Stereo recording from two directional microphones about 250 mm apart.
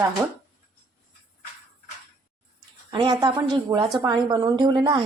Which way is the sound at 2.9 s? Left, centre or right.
Centre.